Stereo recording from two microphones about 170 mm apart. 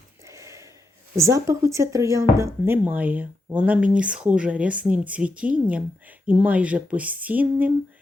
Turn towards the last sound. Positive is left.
turn(degrees=-10)  # may be behind; listen again after turning